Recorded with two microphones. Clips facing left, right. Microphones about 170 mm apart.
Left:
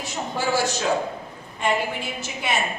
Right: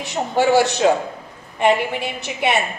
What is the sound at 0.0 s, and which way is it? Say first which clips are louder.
Speech: right 8 dB; 70° right (ahead or behind).